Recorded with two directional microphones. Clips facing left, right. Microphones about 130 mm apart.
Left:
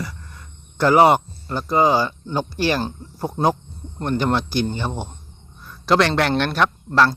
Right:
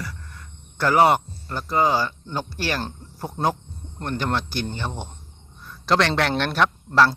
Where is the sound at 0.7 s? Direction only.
20° left (ahead or behind).